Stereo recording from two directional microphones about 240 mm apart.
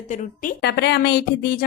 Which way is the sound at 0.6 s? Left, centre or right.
Left.